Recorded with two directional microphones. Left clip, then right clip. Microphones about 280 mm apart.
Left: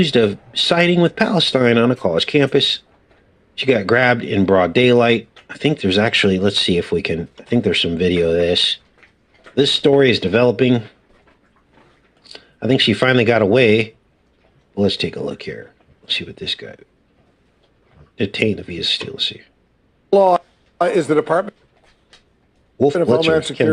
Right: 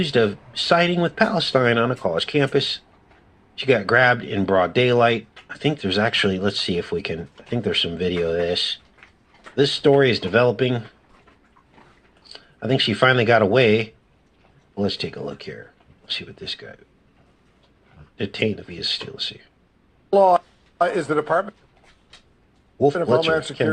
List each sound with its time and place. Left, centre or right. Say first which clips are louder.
0.0 s speech: left 4 dB; left
12.2 s speech: left 6 dB; left
18.2 s speech: left 5 dB; left
22.8 s speech: left 3 dB; left